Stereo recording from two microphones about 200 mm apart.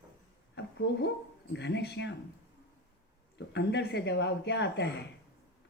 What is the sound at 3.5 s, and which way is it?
A woman's voice, 60° left (ahead or behind).